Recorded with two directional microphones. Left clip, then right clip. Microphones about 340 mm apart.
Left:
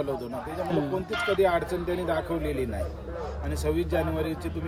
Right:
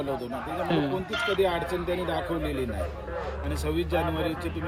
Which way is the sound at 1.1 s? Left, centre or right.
Left.